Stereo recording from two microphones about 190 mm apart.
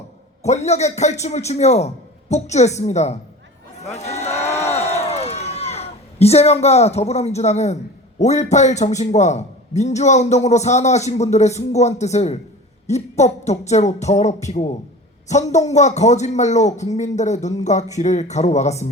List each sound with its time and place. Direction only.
0.4 s a man's voice: 35° left (ahead or behind)
3.8 s a sound: 35° left (ahead or behind)
8.2 s a man's voice: 35° left (ahead or behind)